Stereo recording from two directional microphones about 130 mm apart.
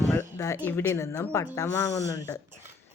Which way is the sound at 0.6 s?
15° left (ahead or behind).